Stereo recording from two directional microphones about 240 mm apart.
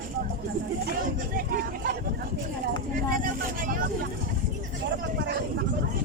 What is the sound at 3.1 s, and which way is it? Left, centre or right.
Vehicle, right.